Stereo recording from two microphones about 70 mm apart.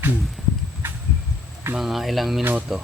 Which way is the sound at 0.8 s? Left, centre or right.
Right.